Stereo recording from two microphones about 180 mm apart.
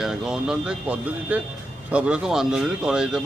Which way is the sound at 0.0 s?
5° right (ahead or behind).